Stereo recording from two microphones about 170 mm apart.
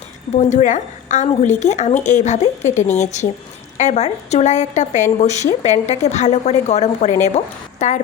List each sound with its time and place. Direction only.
0.3 s a woman's voice: 45° left (ahead or behind)